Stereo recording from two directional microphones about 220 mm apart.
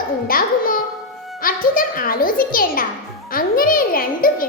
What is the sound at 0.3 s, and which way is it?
A child's voice, 40° left (ahead or behind).